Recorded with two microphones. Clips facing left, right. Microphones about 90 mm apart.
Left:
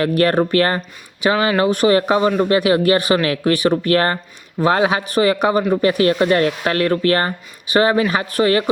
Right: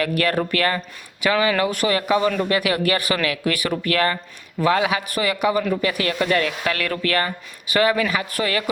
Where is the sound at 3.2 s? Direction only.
35° left (ahead or behind).